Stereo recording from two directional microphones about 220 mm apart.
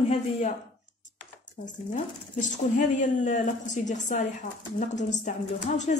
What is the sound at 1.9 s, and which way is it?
A woman's voice, 35° left (ahead or behind).